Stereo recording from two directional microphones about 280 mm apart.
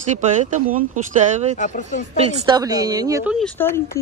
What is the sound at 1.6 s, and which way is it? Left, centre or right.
Speech, left.